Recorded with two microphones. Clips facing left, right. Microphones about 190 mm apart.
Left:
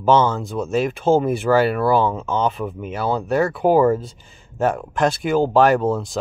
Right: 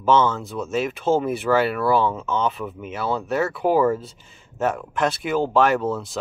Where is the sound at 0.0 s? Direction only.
30° left (ahead or behind).